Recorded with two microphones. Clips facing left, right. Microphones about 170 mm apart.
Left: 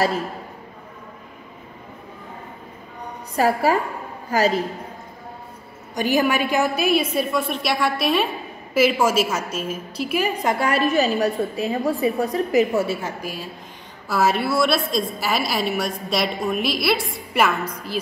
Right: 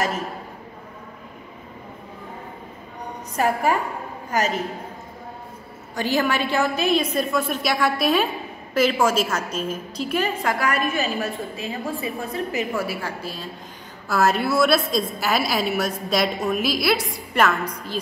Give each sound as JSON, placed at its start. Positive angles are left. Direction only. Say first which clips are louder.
{"t": 3.3, "sound": "a woman's voice", "louder": "left 2 dB", "side_deg": 35}
{"t": 5.9, "sound": "a woman's voice", "louder": "left 2 dB", "side_deg": 15}
{"t": 12.8, "sound": "a woman's voice", "louder": "left 2 dB", "side_deg": 20}
{"t": 14.0, "sound": "a woman's voice", "louder": "even", "side_deg": 0}